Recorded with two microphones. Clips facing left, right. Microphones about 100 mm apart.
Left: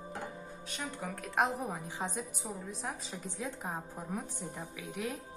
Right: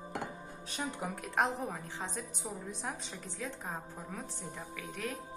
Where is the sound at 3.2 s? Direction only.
15° left (ahead or behind).